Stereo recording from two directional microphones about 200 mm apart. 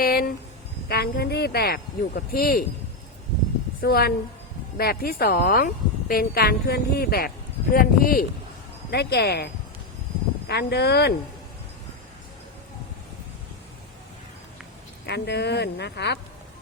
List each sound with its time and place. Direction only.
0.0 s speech: 50° left (ahead or behind)
3.8 s speech: 50° left (ahead or behind)
15.0 s speech: 55° left (ahead or behind)